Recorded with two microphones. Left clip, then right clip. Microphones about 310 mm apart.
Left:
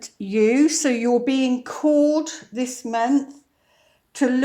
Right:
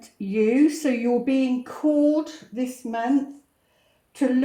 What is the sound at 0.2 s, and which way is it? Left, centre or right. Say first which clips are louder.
Speech: left 2 dB; left.